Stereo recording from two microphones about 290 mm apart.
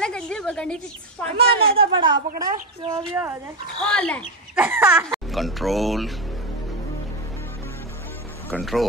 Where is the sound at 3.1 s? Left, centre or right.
Centre.